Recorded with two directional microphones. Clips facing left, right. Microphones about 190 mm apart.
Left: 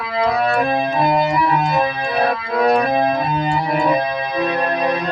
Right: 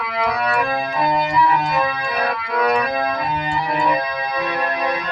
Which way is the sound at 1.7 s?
25° left (ahead or behind).